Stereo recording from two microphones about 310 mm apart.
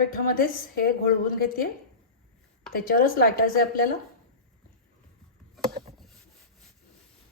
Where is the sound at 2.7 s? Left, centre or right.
Left.